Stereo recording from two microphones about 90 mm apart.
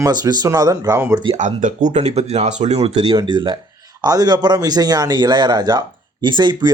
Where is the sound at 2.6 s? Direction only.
90° right.